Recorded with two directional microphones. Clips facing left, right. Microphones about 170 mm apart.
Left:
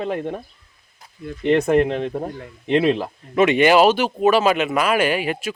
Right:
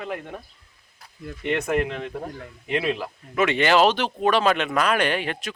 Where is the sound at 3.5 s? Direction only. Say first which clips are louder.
Left 4 dB; 15° left (ahead or behind).